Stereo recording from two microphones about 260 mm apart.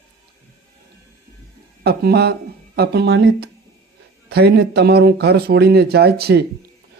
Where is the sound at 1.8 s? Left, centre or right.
Right.